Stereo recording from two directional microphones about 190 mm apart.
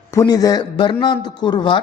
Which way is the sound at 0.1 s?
20° left (ahead or behind).